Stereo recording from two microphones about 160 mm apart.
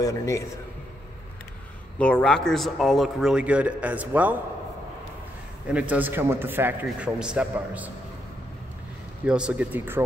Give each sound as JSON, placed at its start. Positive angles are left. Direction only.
{"t": 0.0, "sound": "a man's voice", "side_deg": 20}
{"t": 2.0, "sound": "a man's voice", "side_deg": 5}
{"t": 5.7, "sound": "a man's voice", "side_deg": -10}
{"t": 9.2, "sound": "a man's voice", "side_deg": -5}